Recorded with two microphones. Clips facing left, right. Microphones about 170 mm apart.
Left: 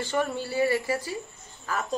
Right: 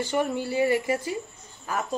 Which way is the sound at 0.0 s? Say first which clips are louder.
Right 2 dB; 15° right (ahead or behind).